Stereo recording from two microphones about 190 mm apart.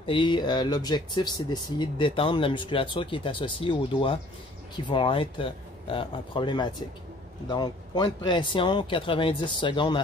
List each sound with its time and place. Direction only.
0.0 s speech: 25° left (ahead or behind)